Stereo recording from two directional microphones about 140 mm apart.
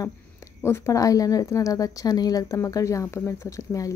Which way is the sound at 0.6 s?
20° left (ahead or behind).